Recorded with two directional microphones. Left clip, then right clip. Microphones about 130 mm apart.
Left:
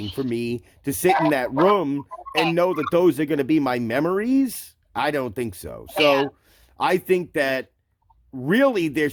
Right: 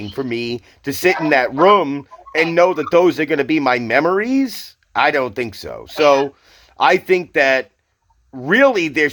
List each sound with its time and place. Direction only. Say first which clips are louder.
0.0 s speech: right 4 dB; 45° left (ahead or behind)